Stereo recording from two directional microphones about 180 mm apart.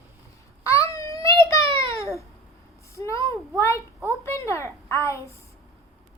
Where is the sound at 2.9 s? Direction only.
15° left (ahead or behind).